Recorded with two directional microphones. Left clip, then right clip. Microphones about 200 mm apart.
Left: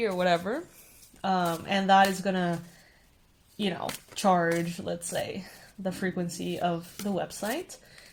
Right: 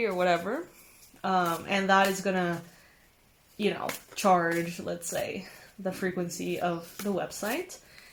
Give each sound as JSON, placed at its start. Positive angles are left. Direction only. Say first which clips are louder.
{"t": 0.0, "sound": "speech", "louder": "even", "side_deg": 45}
{"t": 3.6, "sound": "speech", "louder": "right 2 dB", "side_deg": 40}